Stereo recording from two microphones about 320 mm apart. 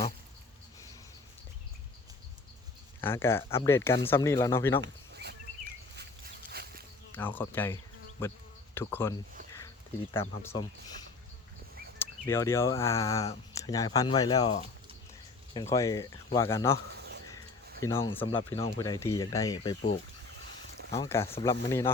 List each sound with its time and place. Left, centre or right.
3.0 s speech: centre
4.8 s a sound: right
7.1 s speech: centre
11.9 s speech: centre
17.8 s speech: centre
20.9 s speech: centre